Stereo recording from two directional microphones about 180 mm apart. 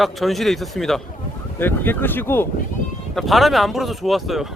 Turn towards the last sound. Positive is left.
turn(degrees=0)  # may be behind; listen again after turning